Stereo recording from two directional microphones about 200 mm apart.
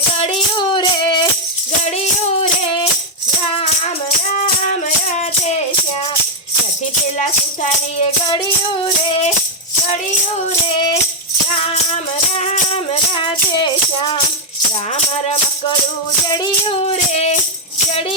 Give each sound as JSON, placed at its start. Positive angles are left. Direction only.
{"t": 0.2, "sound": "music", "side_deg": 25}
{"t": 4.4, "sound": "music", "side_deg": 40}
{"t": 7.2, "sound": "music", "side_deg": 40}
{"t": 8.3, "sound": "music", "side_deg": 25}
{"t": 12.4, "sound": "music", "side_deg": 35}
{"t": 16.3, "sound": "music", "side_deg": 25}